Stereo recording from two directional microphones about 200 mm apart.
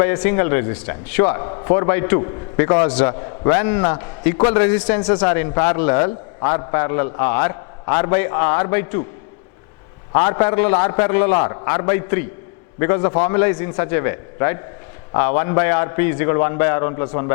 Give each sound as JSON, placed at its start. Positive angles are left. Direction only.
{"t": 0.0, "sound": "a man's voice", "side_deg": 10}
{"t": 10.2, "sound": "a man's voice", "side_deg": 15}